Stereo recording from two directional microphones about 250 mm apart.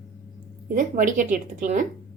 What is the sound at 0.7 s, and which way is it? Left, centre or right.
A woman's voice, right.